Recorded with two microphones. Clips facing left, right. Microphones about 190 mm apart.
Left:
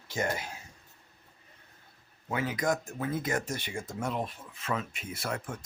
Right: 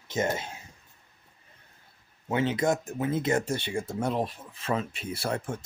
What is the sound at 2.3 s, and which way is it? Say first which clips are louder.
Speech: right 4 dB; 25° right (ahead or behind).